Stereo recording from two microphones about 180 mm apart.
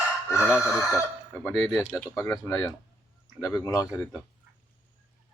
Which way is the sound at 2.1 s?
15° left (ahead or behind).